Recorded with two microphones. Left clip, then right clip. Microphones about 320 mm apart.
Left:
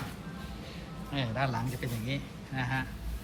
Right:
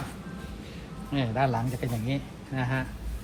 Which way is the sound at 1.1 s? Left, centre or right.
Centre.